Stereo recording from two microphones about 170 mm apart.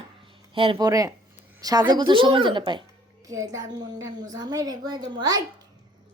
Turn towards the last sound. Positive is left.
turn(degrees=-20)  # may be behind; listen again after turning